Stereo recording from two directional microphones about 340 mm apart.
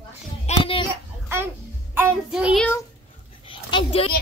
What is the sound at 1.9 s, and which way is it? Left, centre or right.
Child singing, centre.